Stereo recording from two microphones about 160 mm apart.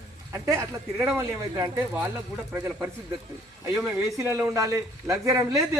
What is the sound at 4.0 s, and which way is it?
Speech, 20° right (ahead or behind).